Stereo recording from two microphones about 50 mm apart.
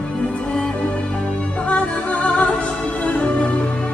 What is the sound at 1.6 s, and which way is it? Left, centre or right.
Music, left.